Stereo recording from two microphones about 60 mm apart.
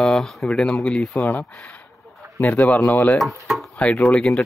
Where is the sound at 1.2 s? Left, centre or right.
Left.